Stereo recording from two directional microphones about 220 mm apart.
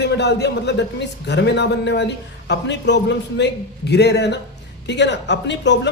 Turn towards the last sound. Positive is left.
turn(degrees=50)  # may be behind; listen again after turning